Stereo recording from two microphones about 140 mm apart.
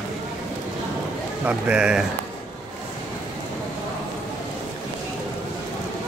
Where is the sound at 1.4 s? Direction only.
10° right (ahead or behind).